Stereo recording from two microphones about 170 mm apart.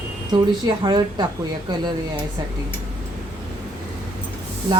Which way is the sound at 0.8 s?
25° right (ahead or behind).